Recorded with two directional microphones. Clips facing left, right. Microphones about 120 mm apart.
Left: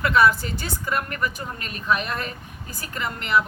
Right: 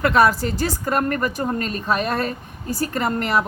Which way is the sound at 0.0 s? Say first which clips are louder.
Right 2 dB; 40° right (ahead or behind).